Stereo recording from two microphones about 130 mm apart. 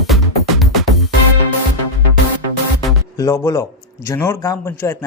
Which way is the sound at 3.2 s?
25° left (ahead or behind).